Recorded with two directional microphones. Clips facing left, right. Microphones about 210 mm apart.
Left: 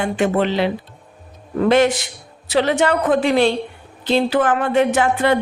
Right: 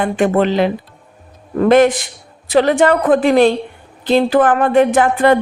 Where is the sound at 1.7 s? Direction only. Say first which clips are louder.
Right 5 dB; 50° right (ahead or behind).